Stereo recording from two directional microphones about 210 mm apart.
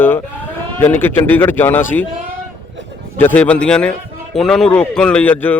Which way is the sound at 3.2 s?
5° left (ahead or behind).